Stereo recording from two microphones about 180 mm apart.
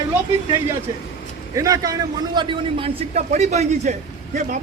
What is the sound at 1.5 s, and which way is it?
A man's voice, 20° right (ahead or behind).